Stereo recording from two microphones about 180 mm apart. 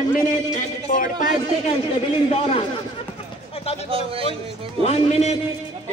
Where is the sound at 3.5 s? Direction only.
35° left (ahead or behind).